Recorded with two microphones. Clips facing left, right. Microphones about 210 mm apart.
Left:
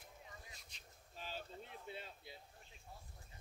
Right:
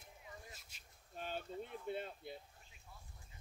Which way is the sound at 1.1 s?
55° right (ahead or behind).